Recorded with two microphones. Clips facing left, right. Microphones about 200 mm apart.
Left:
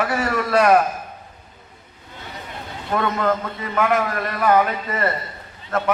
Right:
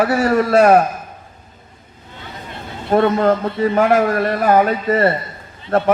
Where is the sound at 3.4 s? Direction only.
35° right (ahead or behind).